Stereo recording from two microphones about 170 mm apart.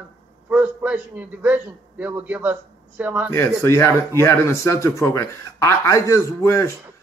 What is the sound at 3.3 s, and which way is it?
A man's voice, 15° left (ahead or behind).